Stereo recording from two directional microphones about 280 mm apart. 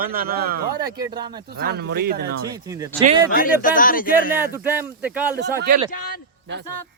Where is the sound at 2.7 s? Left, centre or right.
Centre.